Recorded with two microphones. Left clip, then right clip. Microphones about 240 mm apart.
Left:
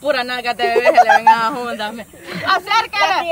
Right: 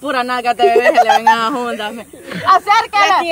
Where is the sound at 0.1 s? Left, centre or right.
Right.